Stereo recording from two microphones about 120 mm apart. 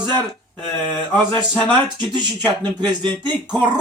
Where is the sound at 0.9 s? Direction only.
15° left (ahead or behind).